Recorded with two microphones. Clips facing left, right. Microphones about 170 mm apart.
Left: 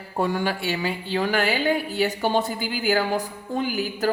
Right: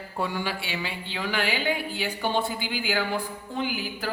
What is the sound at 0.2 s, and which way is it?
A woman's voice, 45° left (ahead or behind).